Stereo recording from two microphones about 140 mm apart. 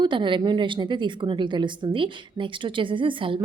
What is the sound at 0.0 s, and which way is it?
A woman's voice, 35° right (ahead or behind).